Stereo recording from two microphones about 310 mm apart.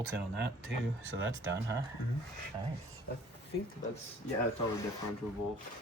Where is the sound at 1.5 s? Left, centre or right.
Centre.